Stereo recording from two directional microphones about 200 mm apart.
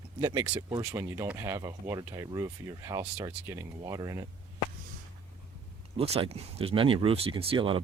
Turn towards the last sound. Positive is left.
turn(degrees=-25)  # may be behind; listen again after turning